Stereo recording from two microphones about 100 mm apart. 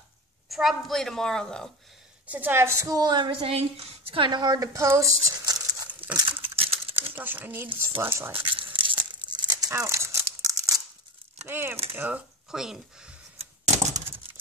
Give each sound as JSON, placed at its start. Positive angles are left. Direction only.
{"t": 0.5, "sound": "a woman's voice", "side_deg": 0}
{"t": 2.2, "sound": "a woman's voice", "side_deg": -15}
{"t": 3.3, "sound": "a woman's voice", "side_deg": -75}
{"t": 5.4, "sound": "crumpling", "side_deg": -40}
{"t": 6.3, "sound": "a sound", "side_deg": -70}
{"t": 7.2, "sound": "a woman's voice", "side_deg": -20}
{"t": 8.3, "sound": "tearing", "side_deg": -60}
{"t": 9.7, "sound": "rattle", "side_deg": -30}
{"t": 11.4, "sound": "a woman's voice", "side_deg": -25}
{"t": 12.4, "sound": "speech", "side_deg": -5}